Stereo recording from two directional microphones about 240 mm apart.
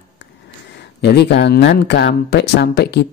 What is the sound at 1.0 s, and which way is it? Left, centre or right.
Speech, left.